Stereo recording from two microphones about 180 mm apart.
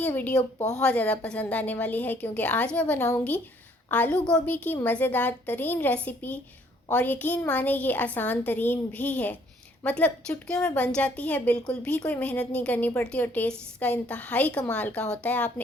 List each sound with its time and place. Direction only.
0.0 s a woman's voice: 10° left (ahead or behind)